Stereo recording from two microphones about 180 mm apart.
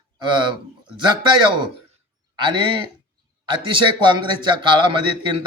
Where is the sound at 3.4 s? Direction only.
25° right (ahead or behind).